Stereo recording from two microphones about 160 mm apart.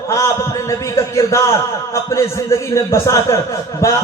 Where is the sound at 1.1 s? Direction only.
20° left (ahead or behind).